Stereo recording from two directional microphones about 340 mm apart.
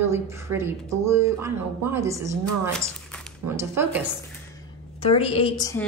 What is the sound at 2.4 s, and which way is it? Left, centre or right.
Speech, centre.